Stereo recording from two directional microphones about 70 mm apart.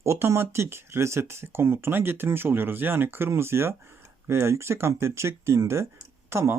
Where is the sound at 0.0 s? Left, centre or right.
Right.